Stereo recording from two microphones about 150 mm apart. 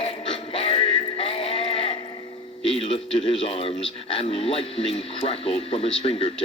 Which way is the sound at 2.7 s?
35° left (ahead or behind).